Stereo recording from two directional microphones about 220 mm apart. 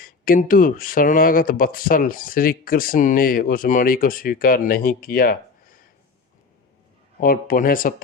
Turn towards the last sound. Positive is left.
turn(degrees=40)  # may be behind; listen again after turning